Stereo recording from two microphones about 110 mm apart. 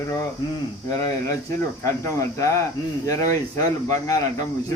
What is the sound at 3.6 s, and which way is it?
Speech, 35° left (ahead or behind).